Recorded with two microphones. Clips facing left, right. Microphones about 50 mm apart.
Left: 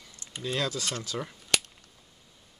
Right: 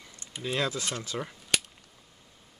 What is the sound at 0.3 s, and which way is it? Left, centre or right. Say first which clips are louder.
Speech: right 1 dB; centre.